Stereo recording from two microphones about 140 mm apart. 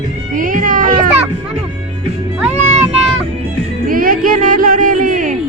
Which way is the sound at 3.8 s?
90° right.